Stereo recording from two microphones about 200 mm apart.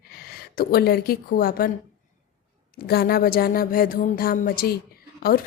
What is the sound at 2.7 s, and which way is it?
A woman's voice, 50° left (ahead or behind).